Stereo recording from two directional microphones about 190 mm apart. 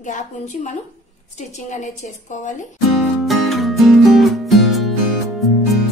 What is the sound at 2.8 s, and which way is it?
Music, centre (ahead or behind).